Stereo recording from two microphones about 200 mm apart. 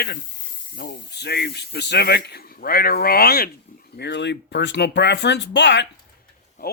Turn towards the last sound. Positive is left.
turn(degrees=50)  # may be behind; listen again after turning